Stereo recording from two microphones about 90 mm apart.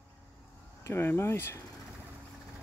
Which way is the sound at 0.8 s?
30° left (ahead or behind).